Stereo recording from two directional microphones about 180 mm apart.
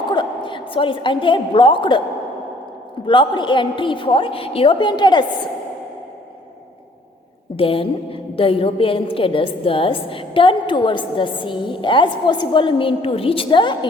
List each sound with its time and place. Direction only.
0.1 s a woman's voice: 25° left (ahead or behind)
3.1 s a woman's voice: 25° left (ahead or behind)
7.5 s a woman's voice: 30° left (ahead or behind)